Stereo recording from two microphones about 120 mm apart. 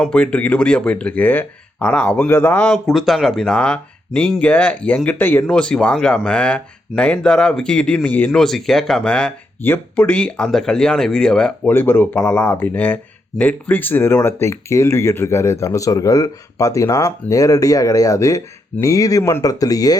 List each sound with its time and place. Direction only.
0.0 s speech: 10° left (ahead or behind)
5.5 s speech: 5° left (ahead or behind)
8.3 s speech: centre (ahead or behind)
11.7 s speech: 15° left (ahead or behind)